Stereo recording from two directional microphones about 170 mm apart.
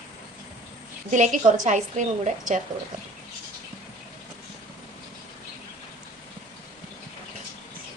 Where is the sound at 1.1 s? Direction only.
45° right (ahead or behind).